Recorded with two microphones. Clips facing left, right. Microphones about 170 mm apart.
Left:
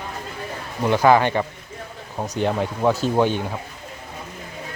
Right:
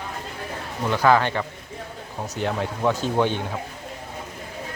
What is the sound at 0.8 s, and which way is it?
Speech, 15° left (ahead or behind).